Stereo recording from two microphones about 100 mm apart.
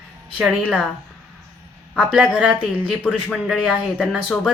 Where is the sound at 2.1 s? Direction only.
5° right (ahead or behind).